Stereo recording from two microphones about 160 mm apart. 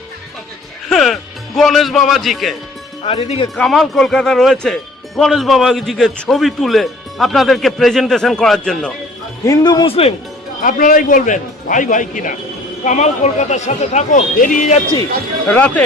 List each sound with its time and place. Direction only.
0.9 s music: centre (ahead or behind)
3.1 s speech: 35° left (ahead or behind)
3.5 s speech: centre (ahead or behind)
9.5 s speech: 25° left (ahead or behind)
10.6 s a man's voice: 55° left (ahead or behind)
15.4 s speech: 10° left (ahead or behind)